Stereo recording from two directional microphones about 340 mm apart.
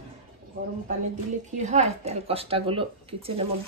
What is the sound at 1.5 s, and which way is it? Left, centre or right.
Speech, right.